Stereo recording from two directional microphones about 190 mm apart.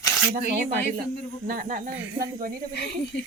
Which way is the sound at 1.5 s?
50° right (ahead or behind).